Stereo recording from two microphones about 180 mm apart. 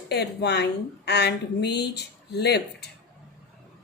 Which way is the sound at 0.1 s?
65° left (ahead or behind).